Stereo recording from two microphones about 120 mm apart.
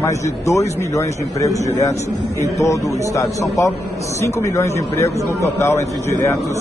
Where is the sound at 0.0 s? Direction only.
25° left (ahead or behind).